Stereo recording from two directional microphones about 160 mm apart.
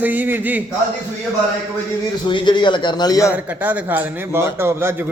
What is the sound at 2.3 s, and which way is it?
A man's voice, 30° left (ahead or behind).